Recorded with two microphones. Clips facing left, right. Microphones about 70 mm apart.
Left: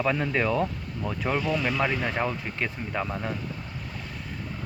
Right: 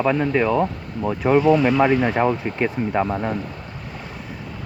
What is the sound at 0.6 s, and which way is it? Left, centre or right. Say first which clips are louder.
Speech: right 6 dB; right.